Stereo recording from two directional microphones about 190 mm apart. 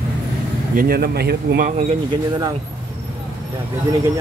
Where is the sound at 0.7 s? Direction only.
50° right (ahead or behind).